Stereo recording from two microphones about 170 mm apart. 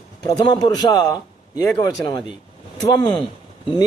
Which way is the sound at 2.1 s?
25° left (ahead or behind).